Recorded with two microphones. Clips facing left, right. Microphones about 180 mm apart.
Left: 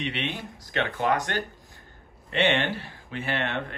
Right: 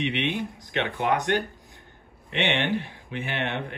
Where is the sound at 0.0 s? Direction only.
20° right (ahead or behind).